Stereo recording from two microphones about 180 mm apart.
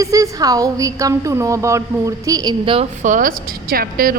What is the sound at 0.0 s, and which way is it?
A woman's voice, 20° right (ahead or behind).